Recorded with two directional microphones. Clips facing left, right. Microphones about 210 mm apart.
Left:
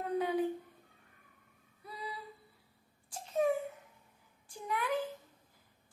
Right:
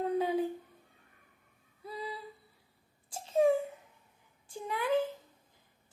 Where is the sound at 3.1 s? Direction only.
25° right (ahead or behind).